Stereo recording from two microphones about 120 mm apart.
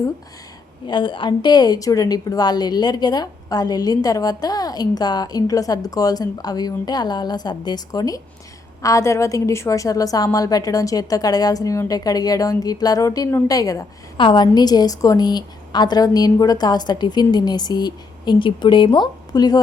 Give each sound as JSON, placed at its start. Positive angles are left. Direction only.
{"t": 0.9, "sound": "a woman's voice", "side_deg": 40}
{"t": 14.2, "sound": "a woman's voice", "side_deg": 40}